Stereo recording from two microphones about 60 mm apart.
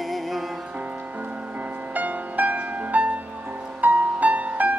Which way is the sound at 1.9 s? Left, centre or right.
Right.